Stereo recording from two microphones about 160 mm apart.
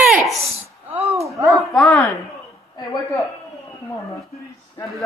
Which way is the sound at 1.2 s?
20° right (ahead or behind).